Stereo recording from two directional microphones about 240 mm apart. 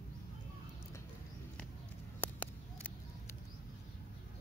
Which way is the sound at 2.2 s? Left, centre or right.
Centre.